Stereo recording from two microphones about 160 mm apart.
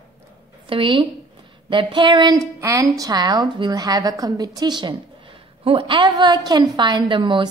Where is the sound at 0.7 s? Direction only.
30° right (ahead or behind).